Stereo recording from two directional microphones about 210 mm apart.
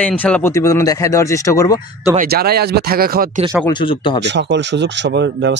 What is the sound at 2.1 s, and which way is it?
Speech, 45° right (ahead or behind).